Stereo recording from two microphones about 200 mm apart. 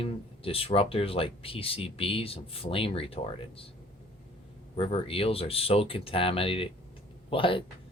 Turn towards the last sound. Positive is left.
turn(degrees=25)  # may be behind; listen again after turning